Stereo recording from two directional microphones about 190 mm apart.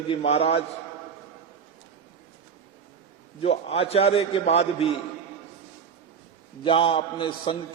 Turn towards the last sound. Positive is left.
turn(degrees=25)  # may be behind; listen again after turning